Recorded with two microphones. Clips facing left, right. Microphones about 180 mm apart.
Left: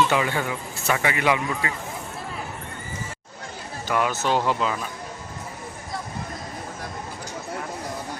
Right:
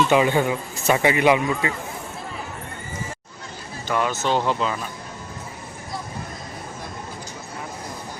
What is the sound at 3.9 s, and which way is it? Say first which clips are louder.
Speech: right 1 dB; 5° left (ahead or behind).